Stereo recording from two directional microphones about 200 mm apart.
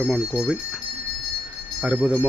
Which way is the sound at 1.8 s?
10° right (ahead or behind).